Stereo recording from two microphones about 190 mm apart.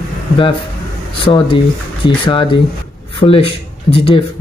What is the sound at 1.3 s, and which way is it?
Speech, 30° left (ahead or behind).